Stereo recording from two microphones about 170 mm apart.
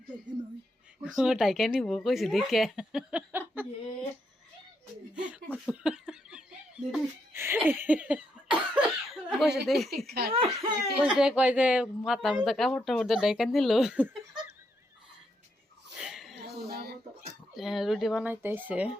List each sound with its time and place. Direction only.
1.0 s speech: 5° right (ahead or behind)
5.1 s snicker: 5° right (ahead or behind)
9.6 s speech: centre (ahead or behind)
10.1 s speech: 65° right (ahead or behind)
10.3 s speech: 30° right (ahead or behind)
11.0 s speech: 5° right (ahead or behind)
16.0 s a sound: centre (ahead or behind)
16.6 s a sound: 65° right (ahead or behind)
17.6 s speech: centre (ahead or behind)